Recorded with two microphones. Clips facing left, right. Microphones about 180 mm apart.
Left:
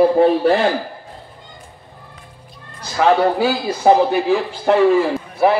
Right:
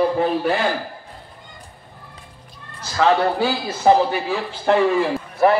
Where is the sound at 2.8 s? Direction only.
15° left (ahead or behind).